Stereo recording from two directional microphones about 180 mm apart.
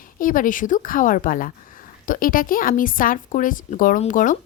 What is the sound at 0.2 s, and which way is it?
A woman's voice, 50° left (ahead or behind).